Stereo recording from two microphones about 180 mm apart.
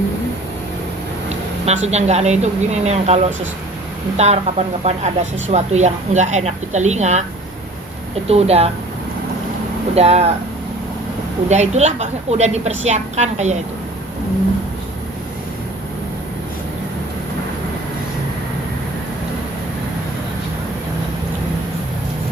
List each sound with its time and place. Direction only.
1.6 s speech: 40° right (ahead or behind)
8.3 s speech: 35° right (ahead or behind)
9.9 s speech: 35° right (ahead or behind)
11.4 s speech: 40° right (ahead or behind)